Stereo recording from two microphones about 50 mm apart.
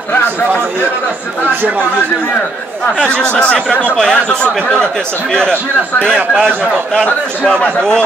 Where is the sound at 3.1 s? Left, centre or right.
Centre.